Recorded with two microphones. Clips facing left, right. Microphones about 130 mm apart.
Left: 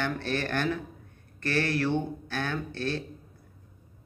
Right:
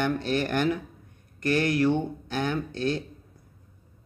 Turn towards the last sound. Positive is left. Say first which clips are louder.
# right 4 dB
turn(degrees=-15)  # may be behind; listen again after turning